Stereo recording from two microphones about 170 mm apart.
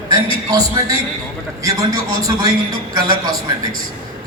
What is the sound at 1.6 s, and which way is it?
A man's voice, 20° right (ahead or behind).